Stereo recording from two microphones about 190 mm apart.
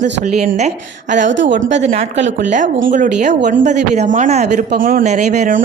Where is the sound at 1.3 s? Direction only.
75° right (ahead or behind).